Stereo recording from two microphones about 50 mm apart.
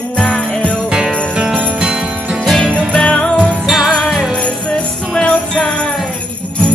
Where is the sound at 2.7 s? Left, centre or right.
Centre.